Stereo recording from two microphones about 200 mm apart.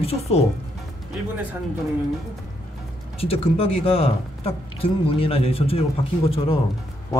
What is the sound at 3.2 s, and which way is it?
Speech, 30° left (ahead or behind).